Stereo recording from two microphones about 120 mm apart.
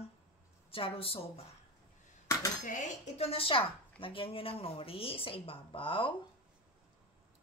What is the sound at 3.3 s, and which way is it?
Speech, 50° left (ahead or behind).